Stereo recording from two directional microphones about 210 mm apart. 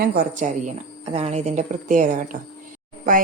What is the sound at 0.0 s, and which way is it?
A woman's voice, 40° right (ahead or behind).